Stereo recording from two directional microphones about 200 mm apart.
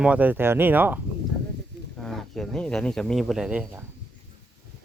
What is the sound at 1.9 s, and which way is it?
Speech, centre (ahead or behind).